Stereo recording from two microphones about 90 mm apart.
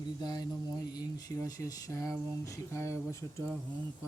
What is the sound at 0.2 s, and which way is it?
Speech, 50° left (ahead or behind).